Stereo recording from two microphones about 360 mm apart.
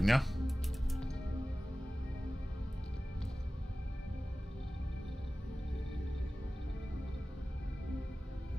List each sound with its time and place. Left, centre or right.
0.0 s music: centre